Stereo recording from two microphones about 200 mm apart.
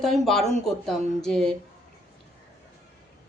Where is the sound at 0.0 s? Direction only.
Centre (ahead or behind).